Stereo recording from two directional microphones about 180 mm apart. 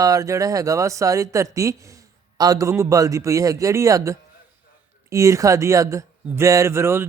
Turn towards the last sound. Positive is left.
turn(degrees=-15)  # may be behind; listen again after turning